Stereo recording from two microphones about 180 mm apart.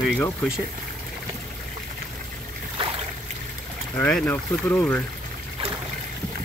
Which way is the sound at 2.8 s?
30° right (ahead or behind).